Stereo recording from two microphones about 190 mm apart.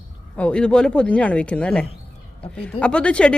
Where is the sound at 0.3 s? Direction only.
5° left (ahead or behind).